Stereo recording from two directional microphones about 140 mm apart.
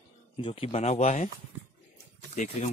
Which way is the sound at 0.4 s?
45° left (ahead or behind).